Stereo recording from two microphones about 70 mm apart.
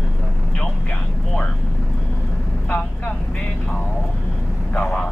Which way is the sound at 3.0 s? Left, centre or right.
Centre.